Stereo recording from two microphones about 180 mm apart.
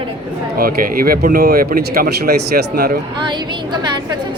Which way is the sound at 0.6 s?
55° right (ahead or behind).